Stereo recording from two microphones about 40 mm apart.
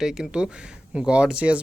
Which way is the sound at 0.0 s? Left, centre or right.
Centre.